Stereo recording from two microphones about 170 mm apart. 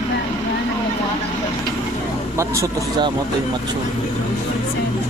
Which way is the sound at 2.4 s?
20° right (ahead or behind).